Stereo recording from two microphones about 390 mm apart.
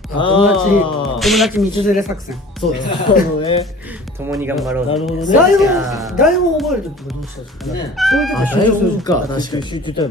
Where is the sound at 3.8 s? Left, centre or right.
Centre.